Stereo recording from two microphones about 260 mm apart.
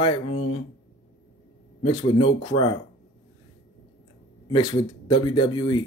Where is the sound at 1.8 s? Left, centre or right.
Left.